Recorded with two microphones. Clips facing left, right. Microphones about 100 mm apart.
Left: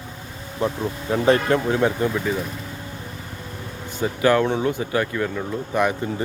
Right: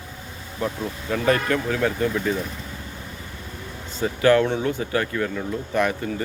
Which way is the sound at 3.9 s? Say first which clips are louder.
Right 1 dB; 15° left (ahead or behind).